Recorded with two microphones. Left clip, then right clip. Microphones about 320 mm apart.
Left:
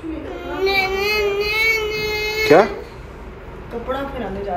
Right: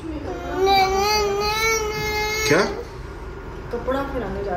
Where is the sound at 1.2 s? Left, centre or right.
Right.